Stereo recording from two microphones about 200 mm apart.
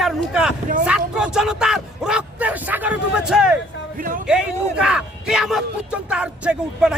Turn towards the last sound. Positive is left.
turn(degrees=-5)  # may be behind; listen again after turning